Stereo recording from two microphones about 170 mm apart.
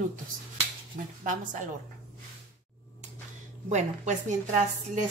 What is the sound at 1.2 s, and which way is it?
Speech, 50° right (ahead or behind).